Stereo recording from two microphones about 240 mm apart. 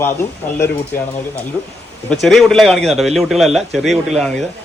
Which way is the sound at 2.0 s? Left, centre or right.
Centre.